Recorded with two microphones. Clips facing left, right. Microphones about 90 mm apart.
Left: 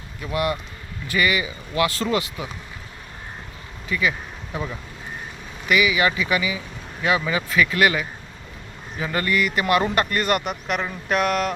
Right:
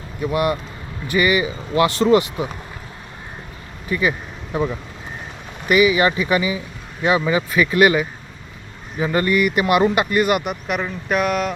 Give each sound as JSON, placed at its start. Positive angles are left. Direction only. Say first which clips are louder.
{"t": 0.3, "sound": "speech", "louder": "right 4 dB", "side_deg": -25}
{"t": 3.8, "sound": "speech", "louder": "right 3 dB", "side_deg": -30}
{"t": 5.6, "sound": "speech", "louder": "right 5 dB", "side_deg": -35}